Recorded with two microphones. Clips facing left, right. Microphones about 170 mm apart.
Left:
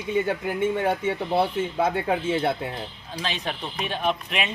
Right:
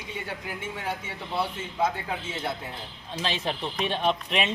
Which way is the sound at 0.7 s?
55° left (ahead or behind).